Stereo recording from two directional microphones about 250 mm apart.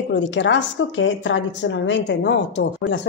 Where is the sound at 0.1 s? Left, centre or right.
Left.